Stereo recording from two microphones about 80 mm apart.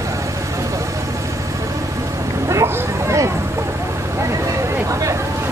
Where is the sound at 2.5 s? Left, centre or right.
Right.